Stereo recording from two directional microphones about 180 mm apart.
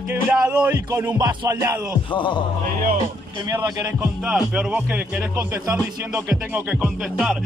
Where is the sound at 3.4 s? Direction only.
20° right (ahead or behind).